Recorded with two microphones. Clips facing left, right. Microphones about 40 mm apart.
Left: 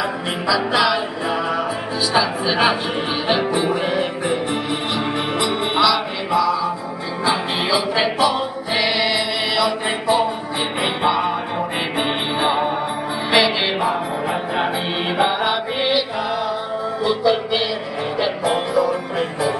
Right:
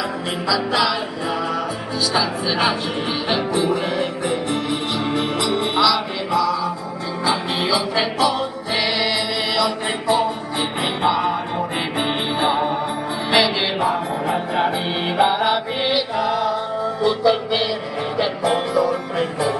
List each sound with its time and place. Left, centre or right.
0.5 s music: centre
9.6 s mantra: centre
10.8 s music: centre